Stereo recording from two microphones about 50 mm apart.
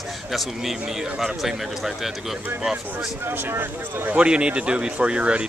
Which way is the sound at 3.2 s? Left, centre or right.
Right.